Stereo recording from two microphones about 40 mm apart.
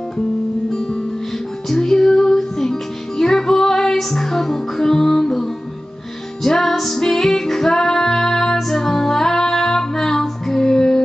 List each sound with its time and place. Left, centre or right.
0.7 s music: centre
1.7 s music: centre